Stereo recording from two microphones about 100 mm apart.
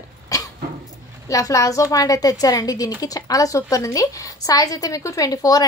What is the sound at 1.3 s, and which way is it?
A woman's voice, 35° left (ahead or behind).